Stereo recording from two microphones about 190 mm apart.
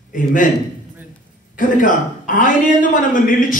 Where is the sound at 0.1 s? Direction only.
45° left (ahead or behind).